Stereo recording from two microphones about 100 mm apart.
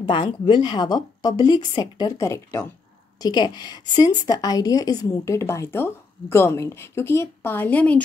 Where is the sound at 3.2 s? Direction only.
45° left (ahead or behind).